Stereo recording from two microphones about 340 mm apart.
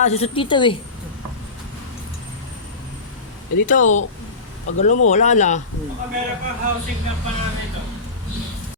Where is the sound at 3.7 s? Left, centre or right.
Left.